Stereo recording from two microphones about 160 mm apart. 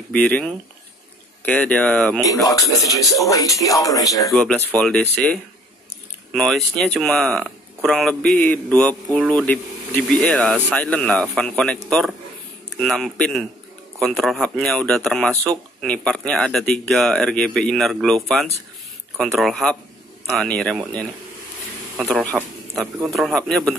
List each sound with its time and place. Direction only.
0.1 s speech: 10° left (ahead or behind)
2.4 s speech: 20° left (ahead or behind)
4.3 s speech: 5° left (ahead or behind)
22.0 s speech: 5° left (ahead or behind)